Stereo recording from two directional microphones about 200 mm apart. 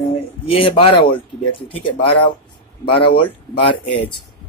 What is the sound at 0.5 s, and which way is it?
Speech, 25° left (ahead or behind).